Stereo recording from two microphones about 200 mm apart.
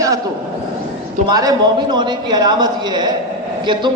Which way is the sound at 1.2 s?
20° right (ahead or behind).